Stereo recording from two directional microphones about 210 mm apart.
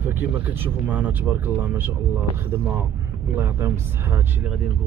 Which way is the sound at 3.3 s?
10° right (ahead or behind).